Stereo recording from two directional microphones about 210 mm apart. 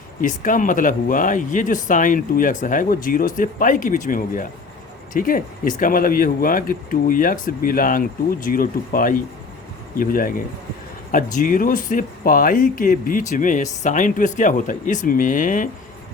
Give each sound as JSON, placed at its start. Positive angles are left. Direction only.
{"t": 0.2, "sound": "speech", "side_deg": 40}